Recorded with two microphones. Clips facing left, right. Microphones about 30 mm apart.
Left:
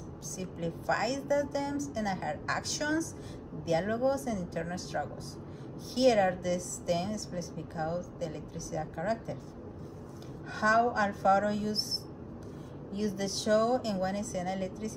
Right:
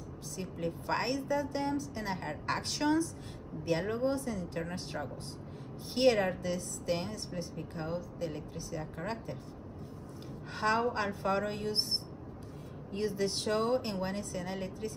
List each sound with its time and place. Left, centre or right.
0.4 s a woman's voice: right
4.6 s a woman's voice: right
10.5 s a woman's voice: right
12.9 s a woman's voice: right